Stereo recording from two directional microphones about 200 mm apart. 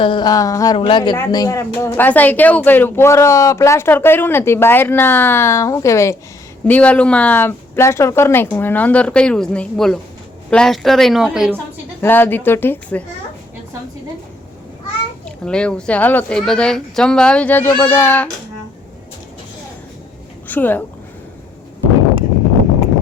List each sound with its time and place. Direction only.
0.0 s a woman's voice: 25° left (ahead or behind); by 11.6 s 5° right (ahead or behind)
12.0 s speech: 10° left (ahead or behind)
15.4 s speech: 5° left (ahead or behind)
20.5 s speech: 10° left (ahead or behind)